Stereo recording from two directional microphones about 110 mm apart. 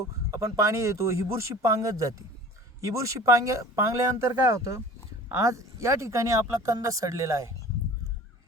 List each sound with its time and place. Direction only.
0.0 s speech: 25° right (ahead or behind)